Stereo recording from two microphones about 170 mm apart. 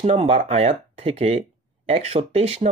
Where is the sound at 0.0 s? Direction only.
40° right (ahead or behind).